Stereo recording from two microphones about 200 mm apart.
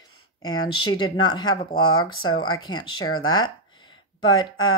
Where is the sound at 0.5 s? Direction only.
90° left.